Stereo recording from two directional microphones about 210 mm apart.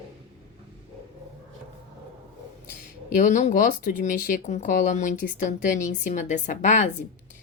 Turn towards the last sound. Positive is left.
turn(degrees=35)  # may be behind; listen again after turning